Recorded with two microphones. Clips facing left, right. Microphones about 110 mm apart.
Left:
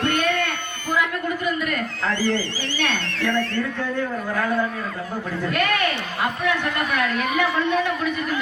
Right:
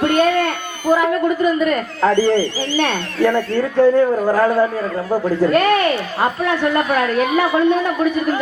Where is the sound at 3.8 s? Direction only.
35° right (ahead or behind).